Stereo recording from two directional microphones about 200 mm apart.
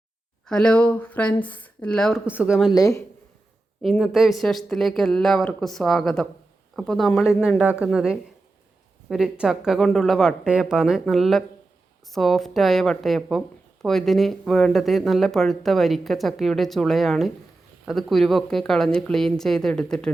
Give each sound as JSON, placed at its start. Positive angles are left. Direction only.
{"t": 0.4, "sound": "speech", "side_deg": 5}
{"t": 2.7, "sound": "speech", "side_deg": 15}
{"t": 3.8, "sound": "speech", "side_deg": 0}